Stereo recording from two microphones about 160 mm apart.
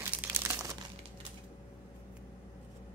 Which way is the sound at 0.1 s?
15° right (ahead or behind).